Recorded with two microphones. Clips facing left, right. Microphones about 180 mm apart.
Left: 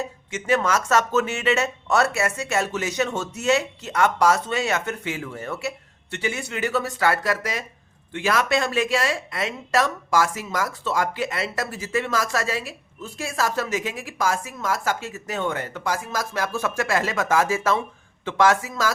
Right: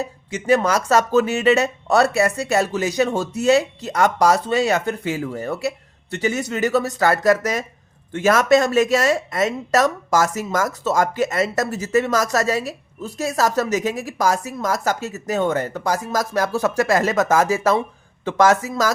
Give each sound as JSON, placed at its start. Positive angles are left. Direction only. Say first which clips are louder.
{"t": 0.0, "sound": "speech", "louder": "right 4 dB", "side_deg": -35}